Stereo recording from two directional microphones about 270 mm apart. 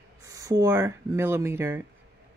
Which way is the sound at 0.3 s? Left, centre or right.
Centre.